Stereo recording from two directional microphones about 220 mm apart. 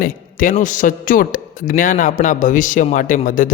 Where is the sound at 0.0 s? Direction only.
40° left (ahead or behind).